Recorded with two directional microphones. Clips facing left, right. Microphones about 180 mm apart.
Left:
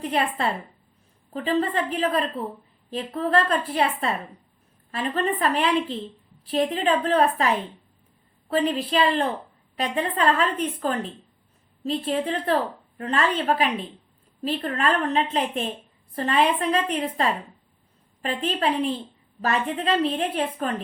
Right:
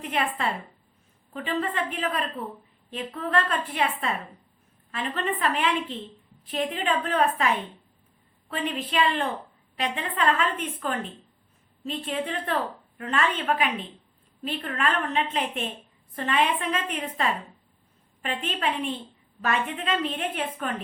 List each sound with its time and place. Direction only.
0.0 s a woman's voice: 35° left (ahead or behind)